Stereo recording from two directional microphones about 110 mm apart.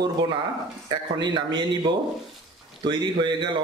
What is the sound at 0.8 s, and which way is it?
Speech, 40° right (ahead or behind).